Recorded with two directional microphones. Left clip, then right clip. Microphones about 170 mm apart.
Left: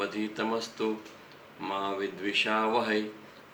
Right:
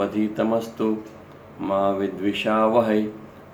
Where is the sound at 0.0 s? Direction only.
15° left (ahead or behind).